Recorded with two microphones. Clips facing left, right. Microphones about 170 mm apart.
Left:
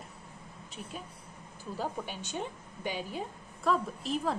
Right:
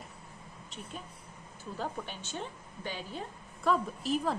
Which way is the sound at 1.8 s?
10° left (ahead or behind).